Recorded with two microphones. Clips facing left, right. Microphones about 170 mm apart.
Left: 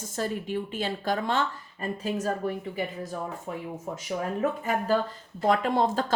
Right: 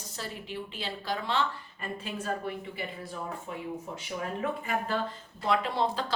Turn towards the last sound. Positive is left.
turn(degrees=45)  # may be behind; listen again after turning